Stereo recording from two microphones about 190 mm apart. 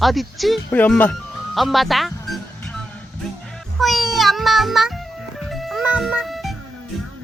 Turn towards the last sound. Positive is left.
turn(degrees=0)  # may be behind; listen again after turning